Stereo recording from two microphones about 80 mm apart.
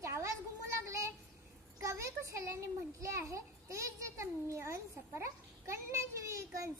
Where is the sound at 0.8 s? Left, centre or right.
Right.